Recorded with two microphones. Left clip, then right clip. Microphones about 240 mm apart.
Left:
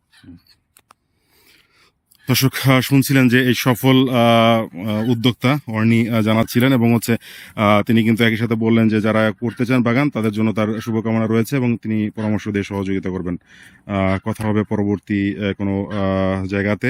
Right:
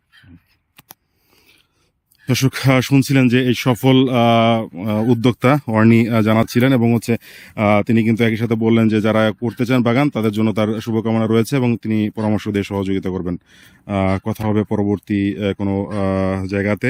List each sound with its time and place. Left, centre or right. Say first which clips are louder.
2.2 s speech: even; centre